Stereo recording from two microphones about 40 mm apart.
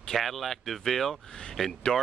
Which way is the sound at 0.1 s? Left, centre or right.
Centre.